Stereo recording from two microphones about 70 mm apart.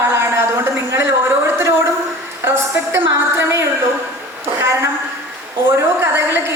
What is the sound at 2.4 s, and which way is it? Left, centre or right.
A woman's voice, right.